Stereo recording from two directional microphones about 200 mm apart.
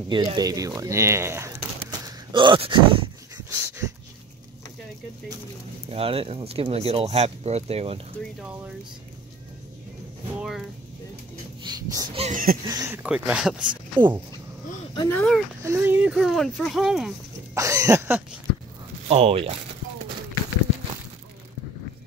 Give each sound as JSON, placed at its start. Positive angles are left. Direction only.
{"t": 0.1, "sound": "speech", "side_deg": -20}
{"t": 3.4, "sound": "dog", "side_deg": -15}
{"t": 5.9, "sound": "speech", "side_deg": -30}
{"t": 8.2, "sound": "speech", "side_deg": -5}
{"t": 11.6, "sound": "a sound", "side_deg": -20}
{"t": 12.2, "sound": "a sound", "side_deg": -40}
{"t": 12.6, "sound": "speech", "side_deg": -15}
{"t": 15.0, "sound": "speech", "side_deg": 5}
{"t": 15.6, "sound": "speech", "side_deg": -10}
{"t": 17.6, "sound": "a sound", "side_deg": -15}
{"t": 19.0, "sound": "speech", "side_deg": -30}